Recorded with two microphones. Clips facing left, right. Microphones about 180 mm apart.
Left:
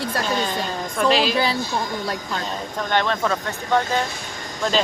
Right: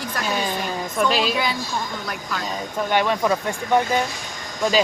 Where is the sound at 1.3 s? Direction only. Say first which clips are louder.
Left 3 dB; 30° left (ahead or behind).